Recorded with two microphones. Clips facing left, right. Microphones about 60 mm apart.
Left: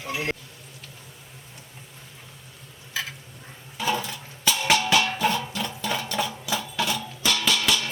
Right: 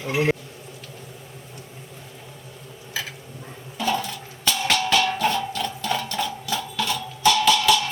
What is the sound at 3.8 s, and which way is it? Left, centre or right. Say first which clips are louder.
Music: right 2 dB; centre.